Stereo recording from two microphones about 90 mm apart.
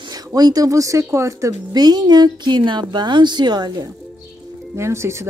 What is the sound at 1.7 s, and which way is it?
Speech, 50° right (ahead or behind).